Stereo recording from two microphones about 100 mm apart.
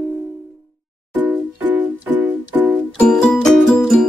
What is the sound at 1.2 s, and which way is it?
Music, 20° right (ahead or behind).